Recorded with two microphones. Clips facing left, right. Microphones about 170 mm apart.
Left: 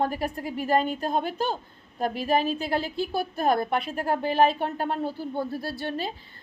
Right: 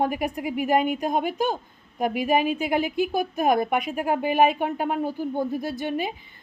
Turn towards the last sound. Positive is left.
turn(degrees=-15)  # may be behind; listen again after turning